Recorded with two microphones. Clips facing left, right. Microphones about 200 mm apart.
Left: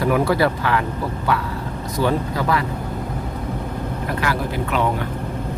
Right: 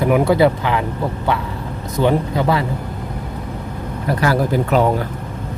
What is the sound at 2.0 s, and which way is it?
Speech, 20° right (ahead or behind).